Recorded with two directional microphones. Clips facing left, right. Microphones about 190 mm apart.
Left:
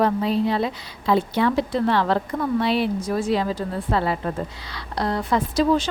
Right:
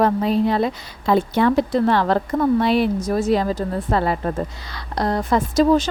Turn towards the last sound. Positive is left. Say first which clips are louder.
# right 4 dB
turn(degrees=-45)  # may be behind; listen again after turning